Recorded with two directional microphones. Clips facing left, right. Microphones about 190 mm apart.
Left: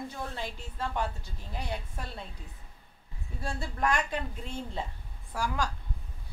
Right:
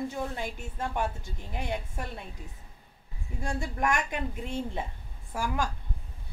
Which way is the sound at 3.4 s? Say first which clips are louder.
Right 1 dB; 15° right (ahead or behind).